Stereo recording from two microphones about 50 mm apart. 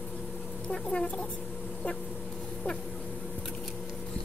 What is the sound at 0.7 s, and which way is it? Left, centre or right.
Speech, centre.